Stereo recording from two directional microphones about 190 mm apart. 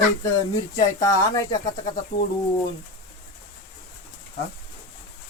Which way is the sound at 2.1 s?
60° left (ahead or behind).